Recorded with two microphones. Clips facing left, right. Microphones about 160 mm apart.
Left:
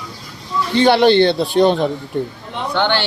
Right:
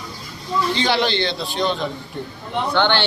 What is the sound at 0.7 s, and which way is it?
Speech, 55° left (ahead or behind).